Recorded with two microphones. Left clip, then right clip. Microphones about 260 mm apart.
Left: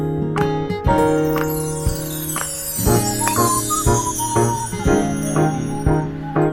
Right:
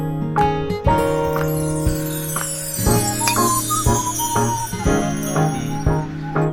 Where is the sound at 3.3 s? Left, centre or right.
Centre.